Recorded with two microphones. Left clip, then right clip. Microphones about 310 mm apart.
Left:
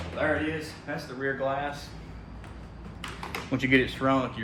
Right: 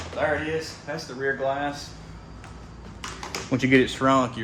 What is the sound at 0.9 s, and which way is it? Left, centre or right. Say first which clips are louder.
Speech: right 4 dB; right.